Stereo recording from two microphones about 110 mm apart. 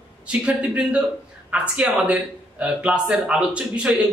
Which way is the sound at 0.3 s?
10° right (ahead or behind).